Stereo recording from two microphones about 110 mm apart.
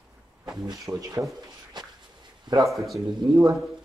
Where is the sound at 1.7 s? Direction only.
40° right (ahead or behind).